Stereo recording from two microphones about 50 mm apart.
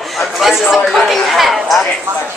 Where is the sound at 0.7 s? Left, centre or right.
Centre.